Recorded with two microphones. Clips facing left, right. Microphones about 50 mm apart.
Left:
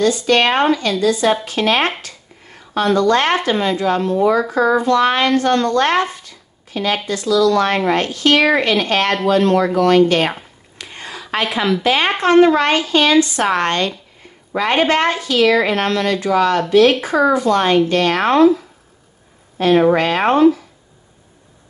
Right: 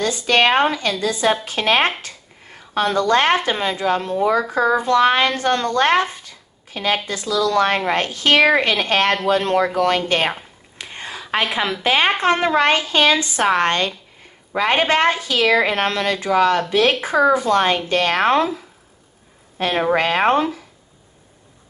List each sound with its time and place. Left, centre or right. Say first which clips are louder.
0.0 s a woman's voice: left 2 dB; right
10.8 s a sound: even; right
11.5 s a woman's voice: left 4 dB; centre
14.5 s a woman's voice: left 2 dB; centre
20.0 s speech: left 2 dB; centre